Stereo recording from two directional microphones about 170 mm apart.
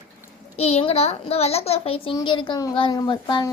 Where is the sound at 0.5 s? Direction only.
40° left (ahead or behind).